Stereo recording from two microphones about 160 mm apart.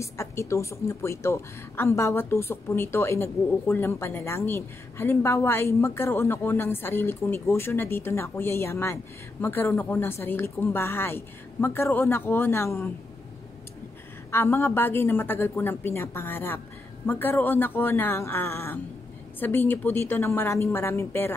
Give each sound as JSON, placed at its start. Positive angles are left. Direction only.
{"t": 0.0, "sound": "a woman's voice", "side_deg": 20}
{"t": 14.3, "sound": "a woman's voice", "side_deg": 15}